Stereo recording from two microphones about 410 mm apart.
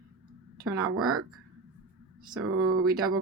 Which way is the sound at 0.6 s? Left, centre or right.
Right.